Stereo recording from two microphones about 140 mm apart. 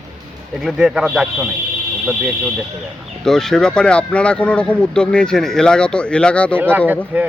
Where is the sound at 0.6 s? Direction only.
Centre (ahead or behind).